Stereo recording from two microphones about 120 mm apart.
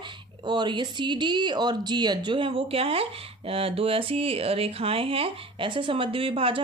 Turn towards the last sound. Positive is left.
turn(degrees=-50)  # may be behind; listen again after turning